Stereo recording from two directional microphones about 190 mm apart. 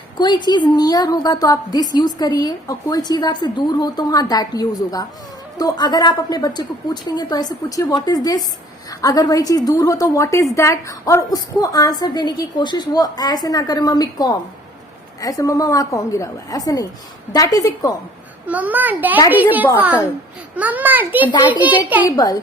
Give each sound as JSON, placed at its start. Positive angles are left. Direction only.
{"t": 0.2, "sound": "a woman's voice", "side_deg": 25}
{"t": 18.4, "sound": "a child's voice", "side_deg": -10}
{"t": 21.3, "sound": "a woman's voice", "side_deg": 25}
{"t": 21.6, "sound": "a child's voice", "side_deg": -10}
{"t": 22.1, "sound": "a woman's voice", "side_deg": 20}